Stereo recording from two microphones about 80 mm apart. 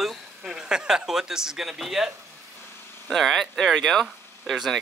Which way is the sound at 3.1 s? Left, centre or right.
Centre.